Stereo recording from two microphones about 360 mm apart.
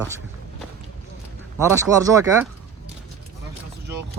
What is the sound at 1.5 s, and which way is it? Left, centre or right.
Speech, centre.